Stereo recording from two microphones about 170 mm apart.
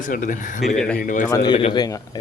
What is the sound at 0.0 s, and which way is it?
Speech, 50° left (ahead or behind).